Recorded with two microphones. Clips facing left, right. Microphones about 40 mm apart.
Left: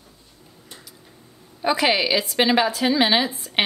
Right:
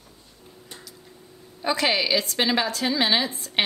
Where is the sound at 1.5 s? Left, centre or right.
Centre.